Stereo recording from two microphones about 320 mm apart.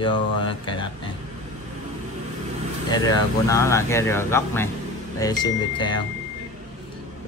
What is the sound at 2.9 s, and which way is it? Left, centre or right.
Speech, centre.